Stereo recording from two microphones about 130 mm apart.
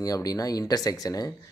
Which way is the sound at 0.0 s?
30° left (ahead or behind).